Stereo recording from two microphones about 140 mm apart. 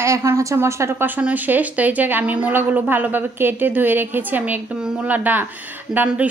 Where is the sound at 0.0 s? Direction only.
20° right (ahead or behind).